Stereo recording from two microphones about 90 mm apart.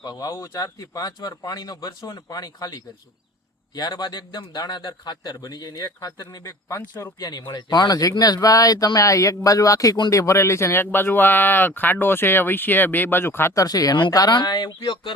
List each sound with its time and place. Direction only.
0.0 s a man's voice: 40° left (ahead or behind)
6.4 s speech: 30° left (ahead or behind)
7.2 s a man's voice: 45° left (ahead or behind)